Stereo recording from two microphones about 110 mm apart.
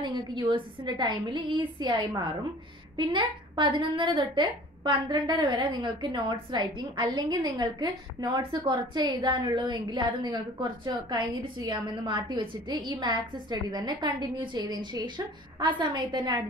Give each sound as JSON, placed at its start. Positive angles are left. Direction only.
{"t": 0.0, "sound": "a woman's voice", "side_deg": -45}
{"t": 3.0, "sound": "a woman's voice", "side_deg": -45}